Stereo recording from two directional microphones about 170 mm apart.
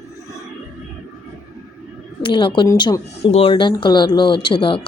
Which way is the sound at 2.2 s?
30° left (ahead or behind).